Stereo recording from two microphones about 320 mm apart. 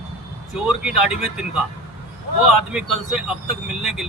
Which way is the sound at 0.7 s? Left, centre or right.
Centre.